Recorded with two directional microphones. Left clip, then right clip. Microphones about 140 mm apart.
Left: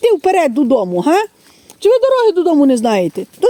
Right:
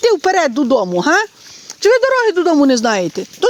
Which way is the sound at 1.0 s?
35° left (ahead or behind).